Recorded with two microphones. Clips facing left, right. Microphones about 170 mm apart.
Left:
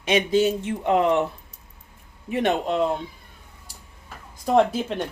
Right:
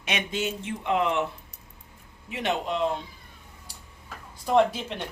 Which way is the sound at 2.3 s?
50° left (ahead or behind).